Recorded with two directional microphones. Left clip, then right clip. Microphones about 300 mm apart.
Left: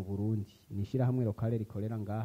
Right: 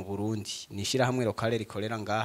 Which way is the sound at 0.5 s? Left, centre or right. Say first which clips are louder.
Right 9 dB; centre.